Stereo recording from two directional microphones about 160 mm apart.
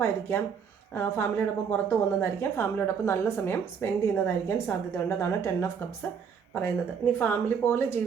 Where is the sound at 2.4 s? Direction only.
15° left (ahead or behind).